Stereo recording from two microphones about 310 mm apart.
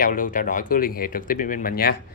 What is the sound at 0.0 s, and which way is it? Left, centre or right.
Speech, left.